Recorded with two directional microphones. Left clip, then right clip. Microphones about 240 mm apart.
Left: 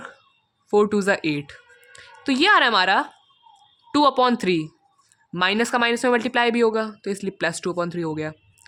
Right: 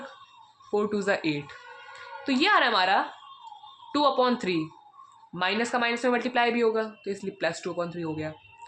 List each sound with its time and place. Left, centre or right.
0.7 s speech: left